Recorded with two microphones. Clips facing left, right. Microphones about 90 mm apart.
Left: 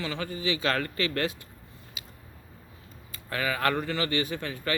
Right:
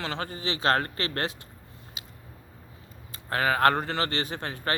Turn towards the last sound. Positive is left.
turn(degrees=-40)  # may be behind; listen again after turning